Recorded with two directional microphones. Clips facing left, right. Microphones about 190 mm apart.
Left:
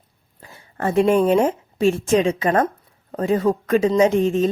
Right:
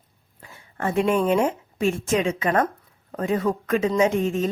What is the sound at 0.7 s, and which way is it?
Speech, 35° left (ahead or behind).